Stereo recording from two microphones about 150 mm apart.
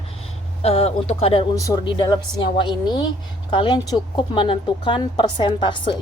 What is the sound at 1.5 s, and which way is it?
A woman's voice, 25° left (ahead or behind).